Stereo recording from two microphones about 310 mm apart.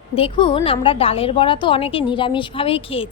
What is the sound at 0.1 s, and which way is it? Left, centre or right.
A woman's voice, centre.